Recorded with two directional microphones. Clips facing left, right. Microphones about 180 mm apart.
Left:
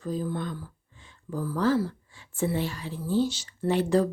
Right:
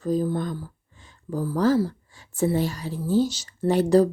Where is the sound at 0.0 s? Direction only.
40° right (ahead or behind).